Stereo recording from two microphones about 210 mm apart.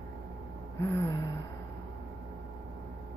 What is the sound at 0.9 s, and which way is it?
Speech, 15° left (ahead or behind).